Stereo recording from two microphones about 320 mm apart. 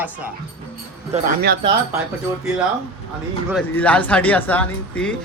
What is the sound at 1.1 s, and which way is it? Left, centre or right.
Speech, right.